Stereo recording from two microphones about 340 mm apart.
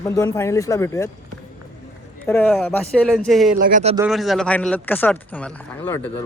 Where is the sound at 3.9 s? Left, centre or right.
Centre.